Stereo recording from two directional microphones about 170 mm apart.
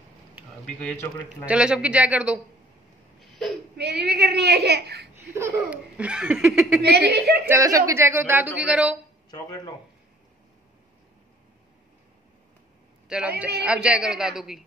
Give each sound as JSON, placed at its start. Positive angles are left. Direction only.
{"t": 0.7, "sound": "a man's voice", "side_deg": 5}
{"t": 1.4, "sound": "speech", "side_deg": -5}
{"t": 3.2, "sound": "a sound", "side_deg": 0}
{"t": 3.7, "sound": "a child's voice", "side_deg": -75}
{"t": 5.3, "sound": "speech", "side_deg": -10}
{"t": 6.8, "sound": "a child's voice", "side_deg": -75}
{"t": 7.4, "sound": "speech", "side_deg": -20}
{"t": 13.6, "sound": "a woman's voice", "side_deg": -5}